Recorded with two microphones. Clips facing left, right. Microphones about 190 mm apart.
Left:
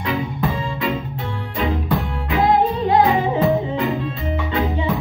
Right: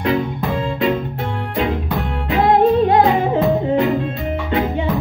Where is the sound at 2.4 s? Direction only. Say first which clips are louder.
Right 5 dB; 60° right (ahead or behind).